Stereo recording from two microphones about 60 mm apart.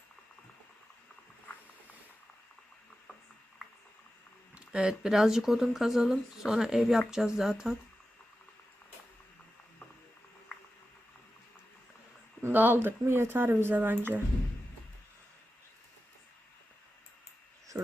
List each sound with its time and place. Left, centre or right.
4.5 s speech: centre
12.4 s speech: right
17.7 s a sound: right